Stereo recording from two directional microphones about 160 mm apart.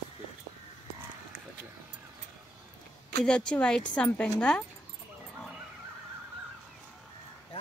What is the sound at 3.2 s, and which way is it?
A woman's voice, 5° left (ahead or behind).